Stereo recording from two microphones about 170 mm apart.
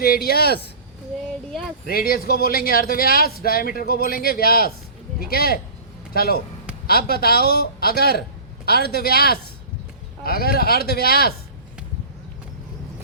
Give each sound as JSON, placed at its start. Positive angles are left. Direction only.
{"t": 0.0, "sound": "speech", "side_deg": 65}
{"t": 1.9, "sound": "speech", "side_deg": 60}